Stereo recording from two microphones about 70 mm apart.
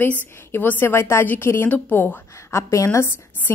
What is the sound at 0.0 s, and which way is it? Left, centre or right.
A woman's voice, left.